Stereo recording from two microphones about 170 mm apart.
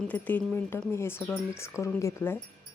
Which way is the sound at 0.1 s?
10° left (ahead or behind).